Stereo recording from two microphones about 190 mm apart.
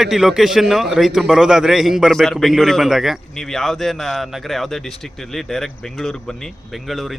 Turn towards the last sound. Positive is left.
turn(degrees=0)  # may be behind; listen again after turning